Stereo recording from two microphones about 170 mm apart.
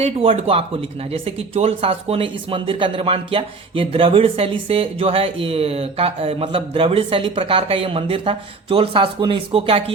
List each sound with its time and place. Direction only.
0.0 s speech: 35° right (ahead or behind)